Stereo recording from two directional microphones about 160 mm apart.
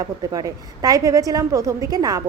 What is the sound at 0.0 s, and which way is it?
A woman's voice, 20° right (ahead or behind).